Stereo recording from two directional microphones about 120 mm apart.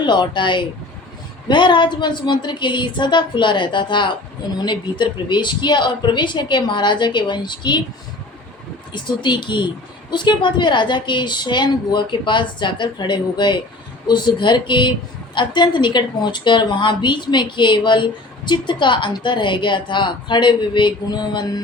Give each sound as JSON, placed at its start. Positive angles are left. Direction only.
{"t": 0.0, "sound": "a woman's voice", "side_deg": 40}
{"t": 8.9, "sound": "a woman's voice", "side_deg": 40}